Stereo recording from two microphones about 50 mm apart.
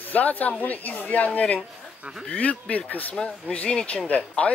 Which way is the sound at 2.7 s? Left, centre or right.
Left.